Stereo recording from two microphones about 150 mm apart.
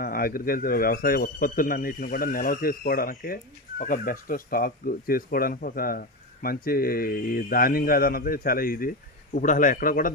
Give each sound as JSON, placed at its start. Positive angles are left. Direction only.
{"t": 0.0, "sound": "speech", "side_deg": 75}